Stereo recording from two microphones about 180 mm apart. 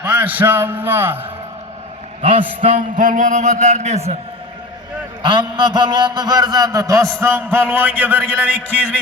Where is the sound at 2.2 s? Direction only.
30° right (ahead or behind).